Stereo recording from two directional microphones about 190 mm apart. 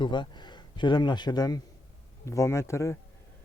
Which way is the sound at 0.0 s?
25° left (ahead or behind).